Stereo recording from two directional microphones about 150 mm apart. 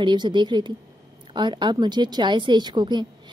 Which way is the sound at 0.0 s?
30° right (ahead or behind).